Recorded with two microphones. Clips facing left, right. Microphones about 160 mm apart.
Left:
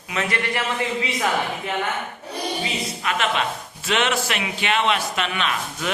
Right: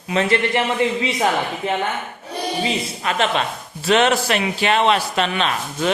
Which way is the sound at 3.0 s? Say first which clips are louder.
Right 3 dB; 35° right (ahead or behind).